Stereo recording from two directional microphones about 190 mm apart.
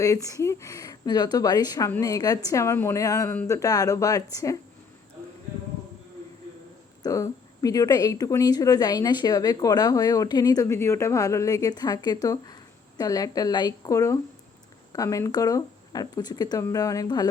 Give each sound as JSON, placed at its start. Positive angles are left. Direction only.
{"t": 0.0, "sound": "speech", "side_deg": 15}
{"t": 7.0, "sound": "speech", "side_deg": 20}